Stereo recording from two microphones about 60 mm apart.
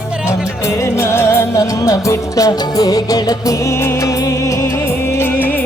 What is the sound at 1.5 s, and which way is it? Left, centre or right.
Music, left.